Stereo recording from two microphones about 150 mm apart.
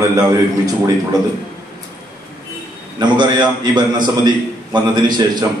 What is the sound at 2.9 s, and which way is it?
A man's voice, 30° right (ahead or behind).